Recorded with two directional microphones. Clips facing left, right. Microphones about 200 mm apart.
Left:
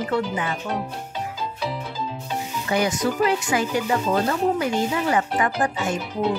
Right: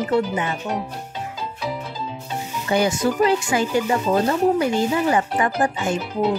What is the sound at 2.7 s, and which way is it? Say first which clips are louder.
Speech: right 3 dB; 30° right (ahead or behind).